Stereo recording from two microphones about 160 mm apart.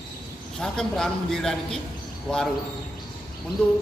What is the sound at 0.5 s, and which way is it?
A man's voice, 5° left (ahead or behind).